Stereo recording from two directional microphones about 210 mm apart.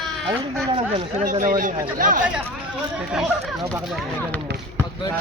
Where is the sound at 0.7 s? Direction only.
35° right (ahead or behind).